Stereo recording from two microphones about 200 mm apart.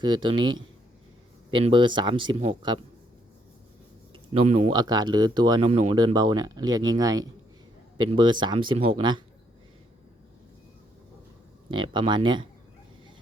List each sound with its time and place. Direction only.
0.0 s speech: 20° right (ahead or behind)
4.1 s speech: 30° right (ahead or behind)
4.7 s speech: 20° right (ahead or behind)
11.7 s speech: 25° right (ahead or behind)